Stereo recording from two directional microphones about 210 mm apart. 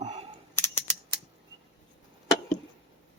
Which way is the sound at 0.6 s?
10° left (ahead or behind).